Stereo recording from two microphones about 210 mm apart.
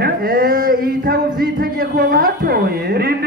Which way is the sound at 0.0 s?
45° right (ahead or behind).